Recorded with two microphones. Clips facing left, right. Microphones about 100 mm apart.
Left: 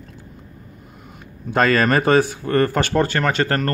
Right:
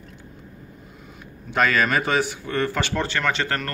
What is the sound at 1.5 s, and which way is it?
Speech, 35° left (ahead or behind).